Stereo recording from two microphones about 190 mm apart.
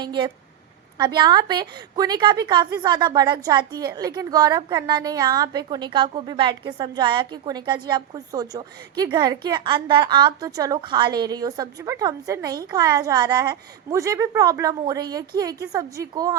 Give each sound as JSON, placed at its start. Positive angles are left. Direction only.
{"t": 0.0, "sound": "a woman's voice", "side_deg": -25}